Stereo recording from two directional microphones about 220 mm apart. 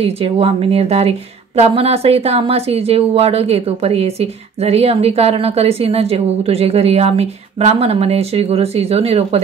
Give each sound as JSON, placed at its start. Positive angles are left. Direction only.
{"t": 0.0, "sound": "speech", "side_deg": -25}